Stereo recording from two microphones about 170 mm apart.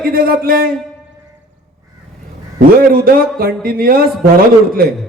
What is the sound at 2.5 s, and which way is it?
A man's voice, 60° right (ahead or behind).